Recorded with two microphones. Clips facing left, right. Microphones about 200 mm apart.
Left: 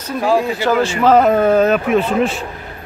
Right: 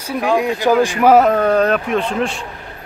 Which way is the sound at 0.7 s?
15° right (ahead or behind).